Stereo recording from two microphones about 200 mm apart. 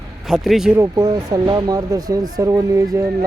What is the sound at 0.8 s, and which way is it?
Speech, 20° right (ahead or behind).